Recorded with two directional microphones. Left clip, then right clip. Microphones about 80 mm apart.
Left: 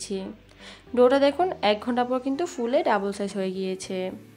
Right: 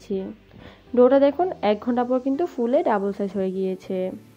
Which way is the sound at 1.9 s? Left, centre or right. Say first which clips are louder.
Right 3 dB; right.